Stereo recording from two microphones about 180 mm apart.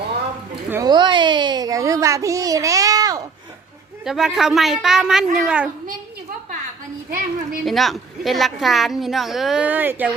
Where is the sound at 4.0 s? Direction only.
5° right (ahead or behind).